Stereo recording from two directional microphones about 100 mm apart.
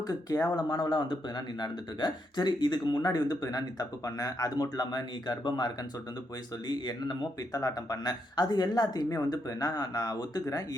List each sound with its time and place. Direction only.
0.1 s speech: 35° left (ahead or behind)